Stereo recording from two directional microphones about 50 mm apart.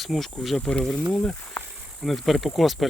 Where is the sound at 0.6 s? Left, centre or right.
Centre.